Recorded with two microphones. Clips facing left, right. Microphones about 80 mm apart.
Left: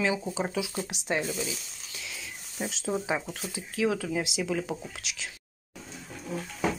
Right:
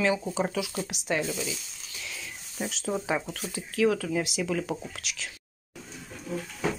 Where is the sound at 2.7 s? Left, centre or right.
Left.